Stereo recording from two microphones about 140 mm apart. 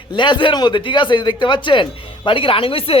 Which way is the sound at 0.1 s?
35° left (ahead or behind).